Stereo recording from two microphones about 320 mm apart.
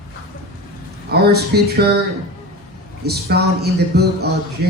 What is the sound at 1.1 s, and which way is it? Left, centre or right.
Speech, right.